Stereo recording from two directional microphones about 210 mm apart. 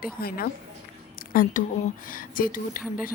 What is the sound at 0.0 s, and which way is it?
A woman's voice, 45° left (ahead or behind).